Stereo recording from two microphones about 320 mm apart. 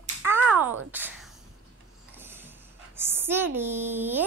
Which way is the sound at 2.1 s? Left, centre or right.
Centre.